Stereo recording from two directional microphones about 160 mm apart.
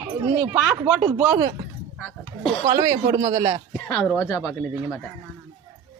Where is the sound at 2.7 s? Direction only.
20° right (ahead or behind).